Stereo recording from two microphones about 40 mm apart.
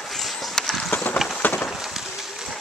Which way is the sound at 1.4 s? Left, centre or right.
Left.